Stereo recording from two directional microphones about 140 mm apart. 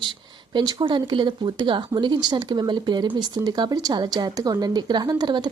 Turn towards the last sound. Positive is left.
turn(degrees=-30)  # may be behind; listen again after turning